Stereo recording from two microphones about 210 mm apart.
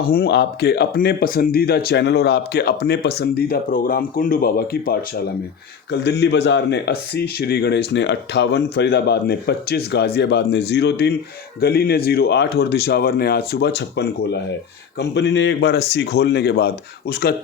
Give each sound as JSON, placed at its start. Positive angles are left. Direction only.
{"t": 0.0, "sound": "speech", "side_deg": 45}